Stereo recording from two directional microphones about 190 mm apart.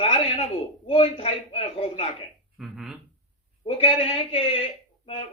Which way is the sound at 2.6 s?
Centre (ahead or behind).